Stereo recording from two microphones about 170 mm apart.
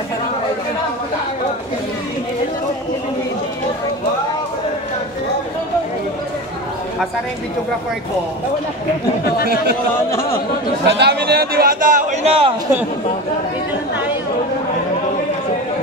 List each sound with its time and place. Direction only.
11.0 s a man's voice: 75° right (ahead or behind); by 12.5 s 35° right (ahead or behind)